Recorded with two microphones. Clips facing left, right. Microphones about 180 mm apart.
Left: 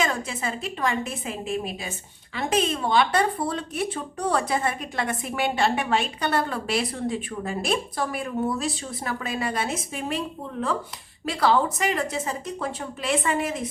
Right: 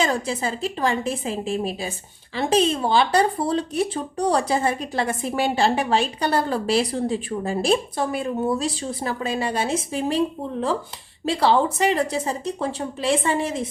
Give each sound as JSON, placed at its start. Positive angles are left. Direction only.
{"t": 0.0, "sound": "a woman's voice", "side_deg": -35}